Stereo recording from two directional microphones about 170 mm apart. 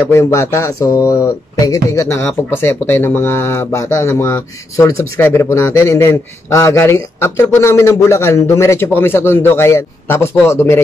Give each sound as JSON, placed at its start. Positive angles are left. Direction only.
{"t": 0.0, "sound": "speech", "side_deg": 15}